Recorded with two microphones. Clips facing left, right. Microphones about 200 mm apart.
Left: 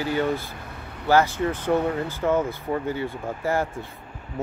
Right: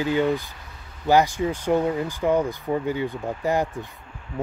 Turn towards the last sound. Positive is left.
turn(degrees=-15)  # may be behind; listen again after turning